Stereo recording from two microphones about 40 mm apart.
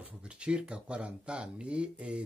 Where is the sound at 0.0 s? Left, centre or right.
Right.